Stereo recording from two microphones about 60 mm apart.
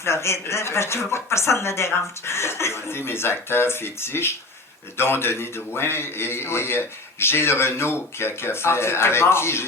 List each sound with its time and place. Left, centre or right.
0.0 s a man's voice: left